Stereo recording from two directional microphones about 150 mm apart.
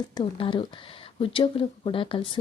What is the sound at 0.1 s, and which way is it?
Speech, 35° left (ahead or behind).